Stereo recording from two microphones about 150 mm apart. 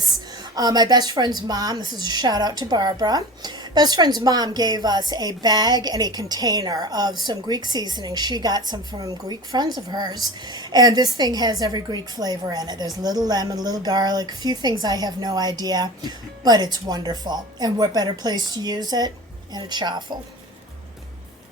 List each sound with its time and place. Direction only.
0.5 s a woman's voice: 25° right (ahead or behind)